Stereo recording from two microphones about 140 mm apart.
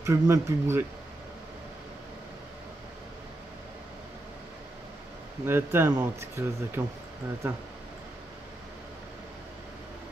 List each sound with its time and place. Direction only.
0.0 s speech: 20° right (ahead or behind)
5.4 s speech: 15° right (ahead or behind)